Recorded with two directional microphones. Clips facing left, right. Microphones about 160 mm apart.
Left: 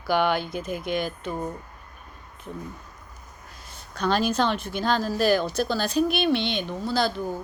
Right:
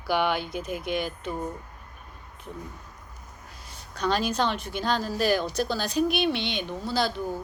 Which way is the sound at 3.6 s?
10° right (ahead or behind).